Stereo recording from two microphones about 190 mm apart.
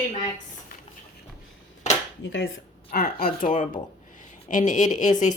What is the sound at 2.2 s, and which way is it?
Speech, 70° left (ahead or behind).